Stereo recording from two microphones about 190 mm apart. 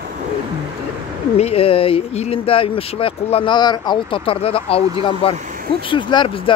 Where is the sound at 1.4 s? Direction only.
30° left (ahead or behind).